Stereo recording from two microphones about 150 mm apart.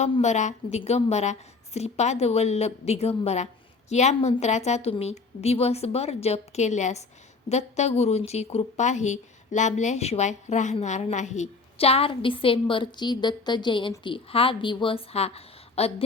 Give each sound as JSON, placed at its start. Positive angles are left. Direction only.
{"t": 0.2, "sound": "a woman's voice", "side_deg": 50}